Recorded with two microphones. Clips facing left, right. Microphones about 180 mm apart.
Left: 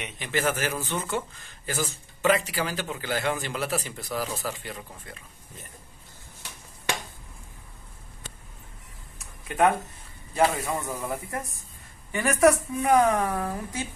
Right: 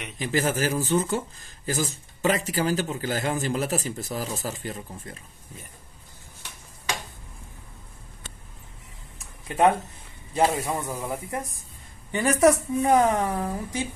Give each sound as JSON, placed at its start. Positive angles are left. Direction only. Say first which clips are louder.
{"t": 0.2, "sound": "speech", "louder": "right 3 dB", "side_deg": -35}
{"t": 9.5, "sound": "a woman's voice", "louder": "right 2 dB", "side_deg": -30}